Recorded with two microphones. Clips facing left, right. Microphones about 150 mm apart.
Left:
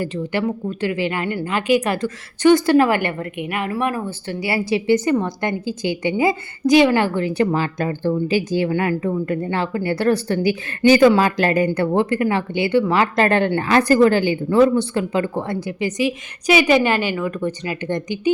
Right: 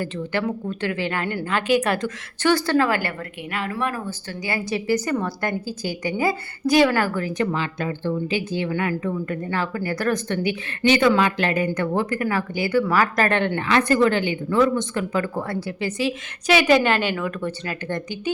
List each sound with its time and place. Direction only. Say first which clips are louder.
0.0 s a woman's voice: left 3 dB; 10° left (ahead or behind)
2.5 s a woman's voice: left 6 dB; 20° left (ahead or behind)
4.4 s a woman's voice: left 5 dB; 30° left (ahead or behind)
7.5 s a woman's voice: left 5 dB; 40° left (ahead or behind); by 16.1 s 15° left (ahead or behind)
16.5 s a woman's voice: left 2 dB; 5° left (ahead or behind)